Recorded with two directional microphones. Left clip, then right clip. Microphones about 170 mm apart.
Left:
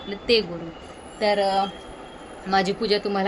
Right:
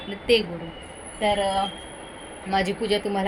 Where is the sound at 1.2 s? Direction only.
20° left (ahead or behind).